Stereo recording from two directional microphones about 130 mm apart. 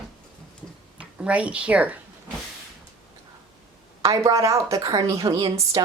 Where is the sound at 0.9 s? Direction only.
10° right (ahead or behind).